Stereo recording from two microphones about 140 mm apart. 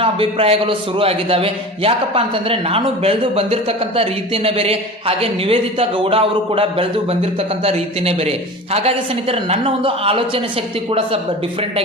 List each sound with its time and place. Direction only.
0.0 s a man's voice: 45° right (ahead or behind)